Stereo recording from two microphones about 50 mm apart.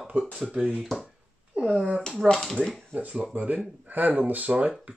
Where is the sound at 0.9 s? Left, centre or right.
Centre.